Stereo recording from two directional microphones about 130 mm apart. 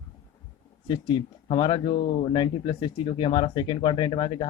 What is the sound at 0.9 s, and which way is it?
Speech, 40° left (ahead or behind).